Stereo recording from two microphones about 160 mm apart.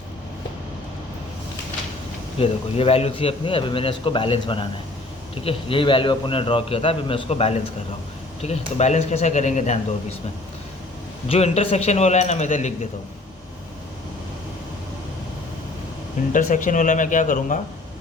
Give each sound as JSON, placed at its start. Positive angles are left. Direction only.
{"t": 2.4, "sound": "a man's voice", "side_deg": 35}
{"t": 11.3, "sound": "a man's voice", "side_deg": 40}
{"t": 16.3, "sound": "a man's voice", "side_deg": 55}